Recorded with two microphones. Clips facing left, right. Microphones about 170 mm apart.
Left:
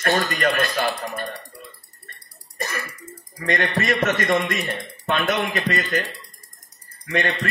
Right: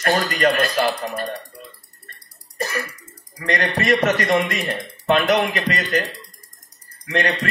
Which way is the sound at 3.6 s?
40° right (ahead or behind).